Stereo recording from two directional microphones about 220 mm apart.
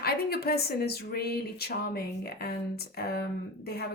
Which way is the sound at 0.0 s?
45° left (ahead or behind).